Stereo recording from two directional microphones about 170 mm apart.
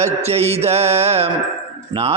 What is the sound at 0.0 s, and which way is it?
Music, 40° right (ahead or behind).